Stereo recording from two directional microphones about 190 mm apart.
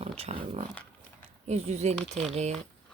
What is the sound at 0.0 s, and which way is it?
Speech, 30° right (ahead or behind).